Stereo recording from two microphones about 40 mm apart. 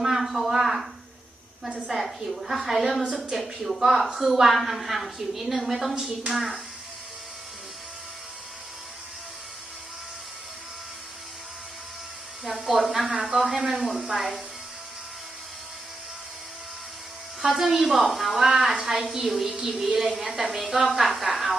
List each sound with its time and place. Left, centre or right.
0.0 s a sound: centre
1.9 s a woman's voice: centre
5.9 s a woman's voice: centre
12.5 s a woman's voice: centre
17.4 s a woman's voice: centre
18.4 s a woman's voice: centre
19.3 s a woman's voice: centre